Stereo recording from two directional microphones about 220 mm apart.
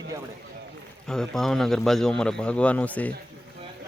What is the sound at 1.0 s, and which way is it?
Speech, centre (ahead or behind).